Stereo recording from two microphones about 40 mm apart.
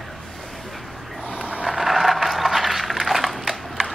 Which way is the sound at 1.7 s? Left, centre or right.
Centre.